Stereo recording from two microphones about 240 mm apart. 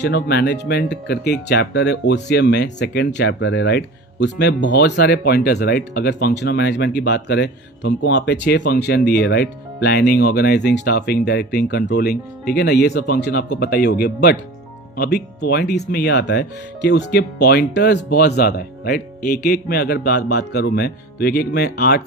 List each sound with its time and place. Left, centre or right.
0.0 s speech: left